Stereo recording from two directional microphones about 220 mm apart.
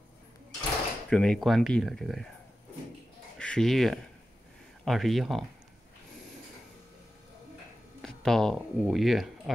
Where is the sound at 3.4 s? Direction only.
5° left (ahead or behind).